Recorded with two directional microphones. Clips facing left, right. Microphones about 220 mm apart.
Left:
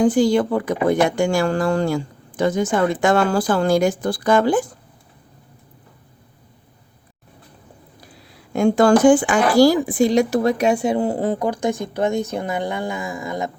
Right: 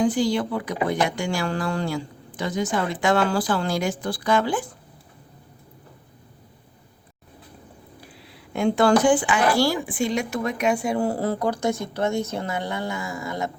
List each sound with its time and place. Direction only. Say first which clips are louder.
0.0 s speech: left 6 dB; 45° left (ahead or behind)
8.5 s speech: left 4 dB; 45° left (ahead or behind)
10.9 s speech: left 3 dB; 20° left (ahead or behind)